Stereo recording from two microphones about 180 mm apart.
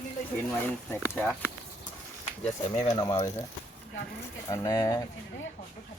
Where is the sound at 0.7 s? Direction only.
5° left (ahead or behind).